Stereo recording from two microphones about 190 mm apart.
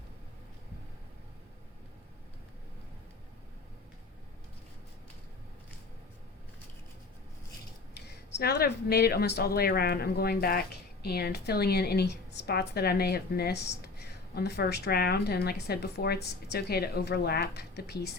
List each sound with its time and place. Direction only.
7.9 s a woman's voice: 60° left (ahead or behind)